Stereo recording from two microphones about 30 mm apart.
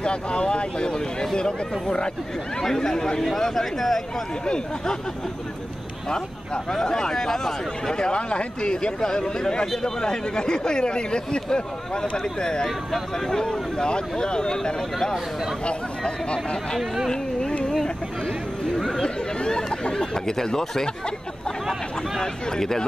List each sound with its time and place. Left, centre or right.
0.0 s speech: left
2.6 s speech: centre
6.0 s speech: left
7.9 s speech: left
9.7 s speech: centre
12.6 s speech: centre
13.4 s speech: left
17.1 s carnatic music: left
19.0 s a sound: left
22.2 s speech: centre